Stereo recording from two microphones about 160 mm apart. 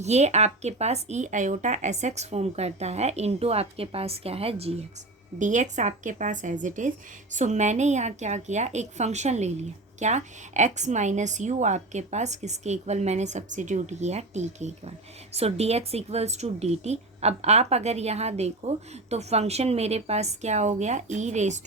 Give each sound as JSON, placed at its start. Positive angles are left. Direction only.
{"t": 0.0, "sound": "a woman's voice", "side_deg": -45}